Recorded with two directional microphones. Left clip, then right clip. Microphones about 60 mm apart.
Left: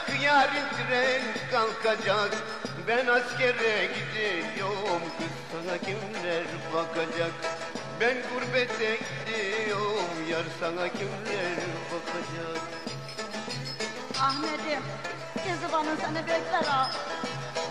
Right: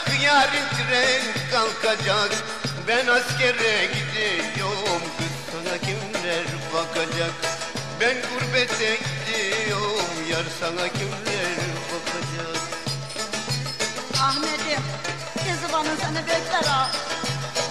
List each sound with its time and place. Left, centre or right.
0.0 s music: right
13.7 s music: right